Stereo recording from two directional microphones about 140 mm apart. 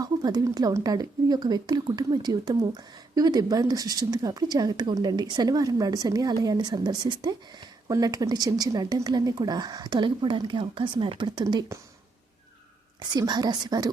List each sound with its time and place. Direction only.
0.0 s speech: 30° right (ahead or behind)
13.0 s speech: 30° right (ahead or behind)